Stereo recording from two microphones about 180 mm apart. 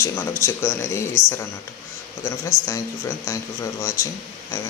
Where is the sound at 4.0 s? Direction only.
15° left (ahead or behind).